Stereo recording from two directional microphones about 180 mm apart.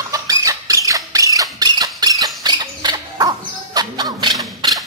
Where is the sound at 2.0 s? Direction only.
20° right (ahead or behind).